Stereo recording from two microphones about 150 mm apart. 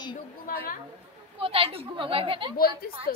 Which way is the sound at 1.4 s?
40° right (ahead or behind).